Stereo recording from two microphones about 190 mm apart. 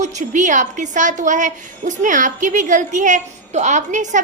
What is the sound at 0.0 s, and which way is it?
A woman's voice, 40° right (ahead or behind).